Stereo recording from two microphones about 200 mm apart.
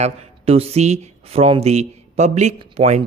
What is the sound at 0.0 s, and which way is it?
Speech, 30° right (ahead or behind).